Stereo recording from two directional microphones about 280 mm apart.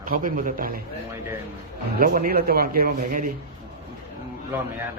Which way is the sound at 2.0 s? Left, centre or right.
Right.